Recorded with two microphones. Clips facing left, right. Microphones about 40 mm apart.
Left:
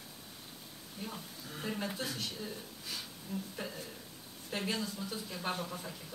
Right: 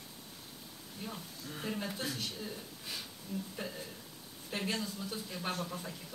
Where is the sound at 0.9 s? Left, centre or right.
Centre.